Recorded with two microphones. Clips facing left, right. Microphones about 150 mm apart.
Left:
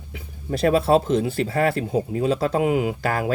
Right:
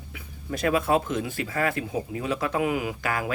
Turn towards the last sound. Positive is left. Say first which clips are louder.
# left 5 dB
turn(degrees=35)  # may be behind; listen again after turning